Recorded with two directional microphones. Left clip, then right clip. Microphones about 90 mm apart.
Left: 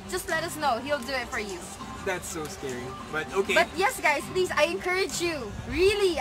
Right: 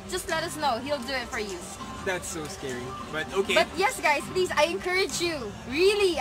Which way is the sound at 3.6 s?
20° left (ahead or behind).